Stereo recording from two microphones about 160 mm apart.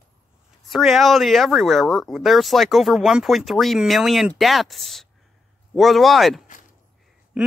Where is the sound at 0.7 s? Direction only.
Centre (ahead or behind).